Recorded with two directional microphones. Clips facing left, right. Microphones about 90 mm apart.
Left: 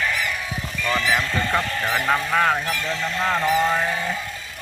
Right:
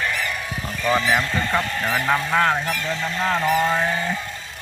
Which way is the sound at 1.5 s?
5° left (ahead or behind).